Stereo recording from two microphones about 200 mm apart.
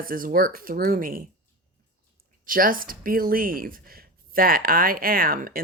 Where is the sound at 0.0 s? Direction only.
45° right (ahead or behind).